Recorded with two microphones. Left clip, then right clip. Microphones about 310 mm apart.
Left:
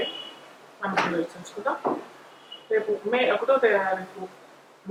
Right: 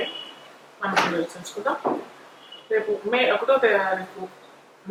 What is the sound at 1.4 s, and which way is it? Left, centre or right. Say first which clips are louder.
Speech: right 2 dB; centre.